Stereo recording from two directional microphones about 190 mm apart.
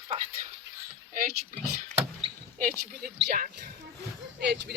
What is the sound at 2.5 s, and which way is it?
Speech, 45° right (ahead or behind).